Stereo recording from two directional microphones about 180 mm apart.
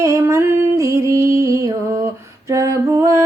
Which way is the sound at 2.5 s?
15° right (ahead or behind).